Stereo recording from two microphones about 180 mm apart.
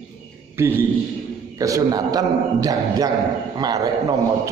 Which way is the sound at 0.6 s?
10° right (ahead or behind).